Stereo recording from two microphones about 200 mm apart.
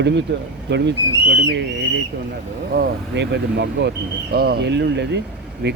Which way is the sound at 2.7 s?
55° right (ahead or behind).